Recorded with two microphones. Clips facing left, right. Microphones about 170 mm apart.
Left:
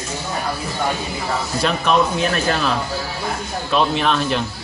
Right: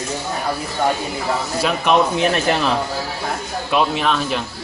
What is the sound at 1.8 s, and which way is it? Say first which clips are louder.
Speech: right 3 dB; 20° right (ahead or behind).